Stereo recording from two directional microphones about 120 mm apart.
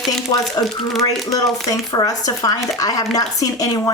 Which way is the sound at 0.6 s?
30° left (ahead or behind).